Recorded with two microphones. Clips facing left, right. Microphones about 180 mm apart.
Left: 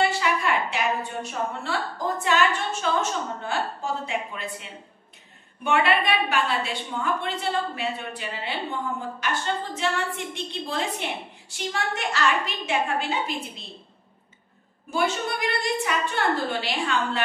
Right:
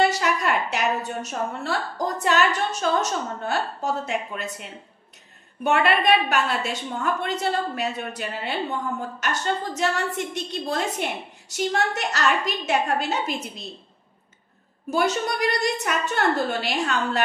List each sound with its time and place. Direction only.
0.0 s a woman's voice: 40° right (ahead or behind)
14.9 s a woman's voice: 40° right (ahead or behind)